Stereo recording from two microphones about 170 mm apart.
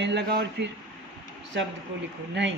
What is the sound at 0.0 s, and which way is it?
Speech, 90° right.